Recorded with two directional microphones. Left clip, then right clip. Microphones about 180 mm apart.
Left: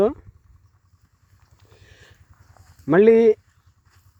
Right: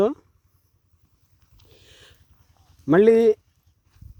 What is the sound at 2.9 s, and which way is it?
Speech, 15° right (ahead or behind).